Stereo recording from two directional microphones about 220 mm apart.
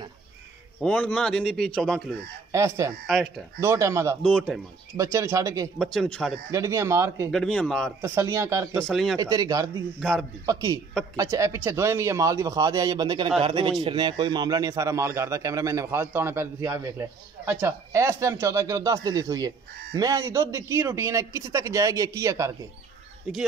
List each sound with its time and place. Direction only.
0.7 s a man's voice: 5° left (ahead or behind)
2.5 s speech: 15° right (ahead or behind)
3.1 s a man's voice: centre (ahead or behind)
3.6 s speech: 15° right (ahead or behind)
4.2 s a man's voice: 5° left (ahead or behind)
4.9 s speech: 15° right (ahead or behind)
5.8 s a man's voice: 5° left (ahead or behind)
6.5 s speech: 15° right (ahead or behind)
7.2 s a man's voice: centre (ahead or behind)
8.0 s speech: 15° right (ahead or behind)
8.7 s a man's voice: centre (ahead or behind)
9.2 s speech: 15° right (ahead or behind)
9.9 s a man's voice: centre (ahead or behind)
10.4 s speech: 15° right (ahead or behind)